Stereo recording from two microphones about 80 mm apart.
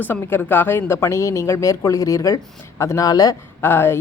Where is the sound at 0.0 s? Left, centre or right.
Left.